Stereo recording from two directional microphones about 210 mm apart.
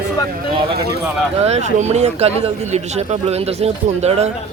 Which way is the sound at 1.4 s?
30° right (ahead or behind).